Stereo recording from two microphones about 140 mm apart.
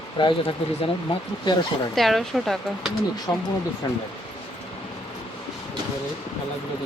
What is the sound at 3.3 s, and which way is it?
Speech, 25° left (ahead or behind).